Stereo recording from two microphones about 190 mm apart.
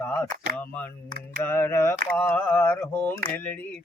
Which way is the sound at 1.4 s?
10° left (ahead or behind).